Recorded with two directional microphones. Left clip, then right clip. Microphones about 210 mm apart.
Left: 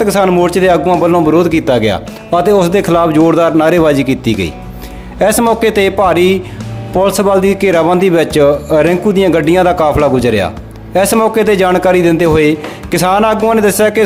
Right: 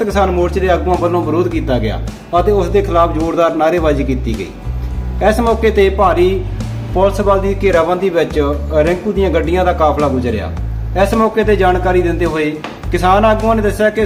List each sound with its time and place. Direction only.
0.0 s a man's voice: 55° left (ahead or behind)